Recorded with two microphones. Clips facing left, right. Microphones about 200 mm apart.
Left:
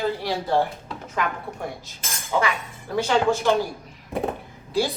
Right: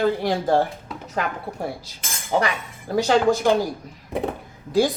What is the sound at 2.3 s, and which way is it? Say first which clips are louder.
Speech: right 2 dB; 40° right (ahead or behind).